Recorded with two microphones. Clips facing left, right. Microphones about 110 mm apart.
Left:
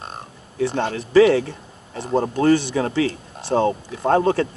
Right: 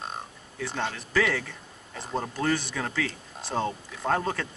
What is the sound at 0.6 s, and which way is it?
Speech, 30° left (ahead or behind).